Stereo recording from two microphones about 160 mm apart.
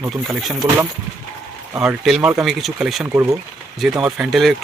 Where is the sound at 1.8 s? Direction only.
5° right (ahead or behind).